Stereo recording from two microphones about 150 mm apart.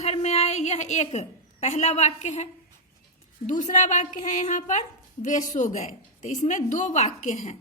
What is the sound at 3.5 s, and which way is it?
A woman's voice, 50° left (ahead or behind).